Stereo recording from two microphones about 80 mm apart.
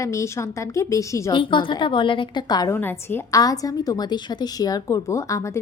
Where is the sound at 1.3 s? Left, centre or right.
Left.